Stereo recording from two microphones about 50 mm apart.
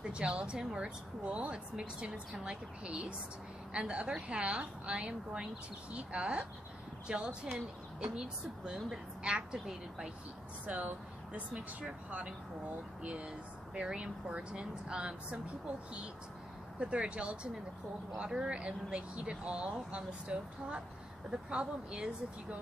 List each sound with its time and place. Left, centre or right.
0.0 s speech: right
10.7 s speech: right
16.8 s speech: right